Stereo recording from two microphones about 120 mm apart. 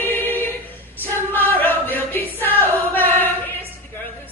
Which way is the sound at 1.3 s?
15° left (ahead or behind).